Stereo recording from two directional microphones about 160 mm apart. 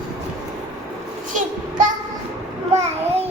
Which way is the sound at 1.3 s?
55° right (ahead or behind).